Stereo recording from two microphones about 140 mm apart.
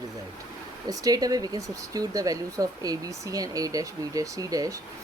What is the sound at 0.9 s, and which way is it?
Speech, 25° right (ahead or behind).